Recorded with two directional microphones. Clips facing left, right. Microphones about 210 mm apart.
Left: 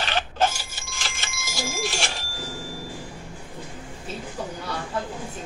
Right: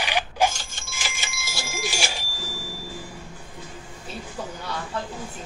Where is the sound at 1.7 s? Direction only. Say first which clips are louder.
Right 2 dB; centre (ahead or behind).